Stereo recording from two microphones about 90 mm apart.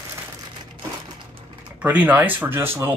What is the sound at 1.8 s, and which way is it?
Speech, 15° right (ahead or behind).